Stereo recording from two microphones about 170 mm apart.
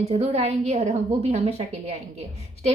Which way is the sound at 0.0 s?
40° right (ahead or behind).